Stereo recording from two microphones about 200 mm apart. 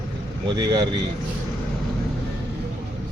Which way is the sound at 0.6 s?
20° right (ahead or behind).